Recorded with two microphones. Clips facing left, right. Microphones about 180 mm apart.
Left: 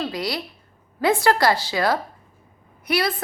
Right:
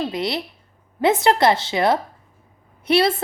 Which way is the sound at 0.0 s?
25° right (ahead or behind).